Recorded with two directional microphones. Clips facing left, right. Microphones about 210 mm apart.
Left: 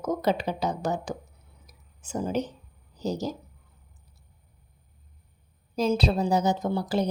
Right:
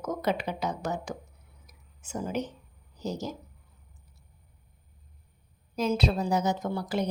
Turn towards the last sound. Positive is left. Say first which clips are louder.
# left 3 dB
turn(degrees=30)  # may be behind; listen again after turning